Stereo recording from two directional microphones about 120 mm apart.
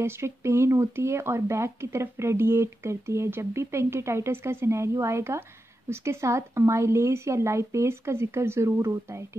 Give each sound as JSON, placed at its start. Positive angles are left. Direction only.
{"t": 0.0, "sound": "speech", "side_deg": -20}